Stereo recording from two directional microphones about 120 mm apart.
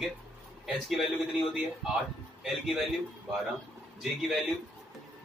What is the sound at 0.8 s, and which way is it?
Speech, centre (ahead or behind).